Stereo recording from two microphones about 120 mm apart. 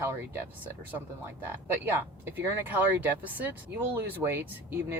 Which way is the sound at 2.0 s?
15° right (ahead or behind).